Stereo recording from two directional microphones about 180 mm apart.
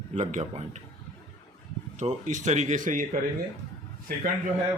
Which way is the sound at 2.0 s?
40° right (ahead or behind).